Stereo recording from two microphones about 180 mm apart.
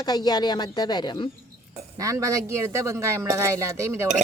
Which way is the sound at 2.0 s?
15° right (ahead or behind).